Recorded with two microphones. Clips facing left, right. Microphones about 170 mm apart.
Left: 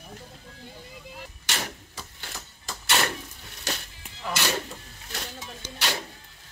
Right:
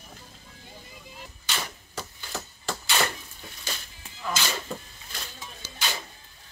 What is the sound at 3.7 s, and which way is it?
Music, 75° left (ahead or behind).